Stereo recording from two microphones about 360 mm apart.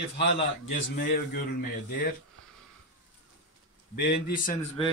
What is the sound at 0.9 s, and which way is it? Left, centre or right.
Speech, left.